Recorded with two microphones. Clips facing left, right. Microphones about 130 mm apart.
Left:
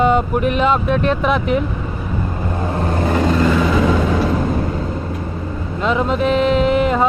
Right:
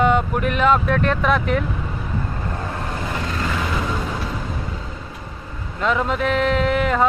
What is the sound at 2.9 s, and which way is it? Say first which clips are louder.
Vehicle: left 12 dB; 50° left (ahead or behind).